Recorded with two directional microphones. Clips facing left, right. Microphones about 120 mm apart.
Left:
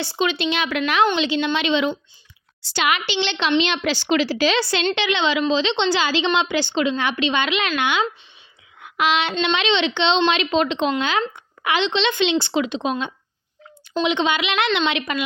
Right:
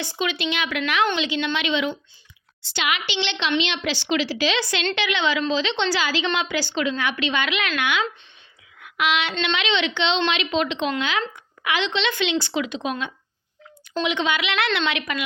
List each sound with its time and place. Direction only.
0.0 s a woman's voice: 30° left (ahead or behind)
8.8 s a sound: 30° left (ahead or behind)
9.4 s a woman's voice: 30° left (ahead or behind)